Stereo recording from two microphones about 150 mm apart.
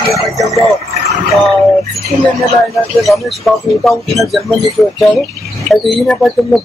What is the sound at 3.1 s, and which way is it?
Speech, centre (ahead or behind).